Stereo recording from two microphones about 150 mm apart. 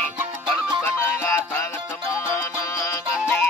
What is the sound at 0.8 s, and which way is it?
Music, 15° left (ahead or behind).